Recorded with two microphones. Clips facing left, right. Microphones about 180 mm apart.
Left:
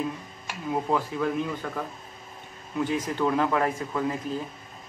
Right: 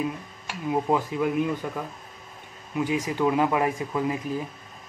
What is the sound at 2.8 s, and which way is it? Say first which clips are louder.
Speech: right 2 dB; 10° right (ahead or behind).